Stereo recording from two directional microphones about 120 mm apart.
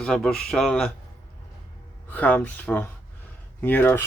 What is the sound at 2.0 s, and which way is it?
Speech, 15° left (ahead or behind).